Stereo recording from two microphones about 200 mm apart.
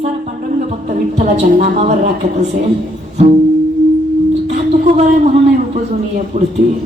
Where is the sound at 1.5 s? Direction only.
40° right (ahead or behind).